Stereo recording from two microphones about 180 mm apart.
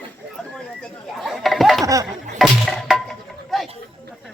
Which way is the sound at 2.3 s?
Centre (ahead or behind).